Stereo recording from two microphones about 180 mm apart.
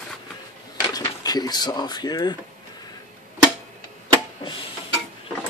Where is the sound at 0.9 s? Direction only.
20° left (ahead or behind).